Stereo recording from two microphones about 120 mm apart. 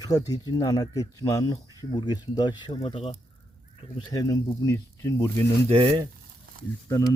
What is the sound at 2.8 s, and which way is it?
Speech, 55° left (ahead or behind).